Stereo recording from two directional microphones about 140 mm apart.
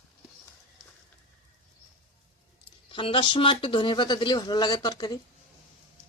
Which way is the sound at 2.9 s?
40° left (ahead or behind).